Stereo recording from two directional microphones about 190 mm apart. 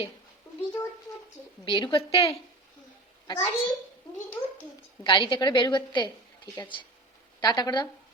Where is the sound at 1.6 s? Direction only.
25° left (ahead or behind).